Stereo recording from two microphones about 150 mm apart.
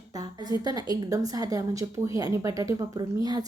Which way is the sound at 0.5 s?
25° right (ahead or behind).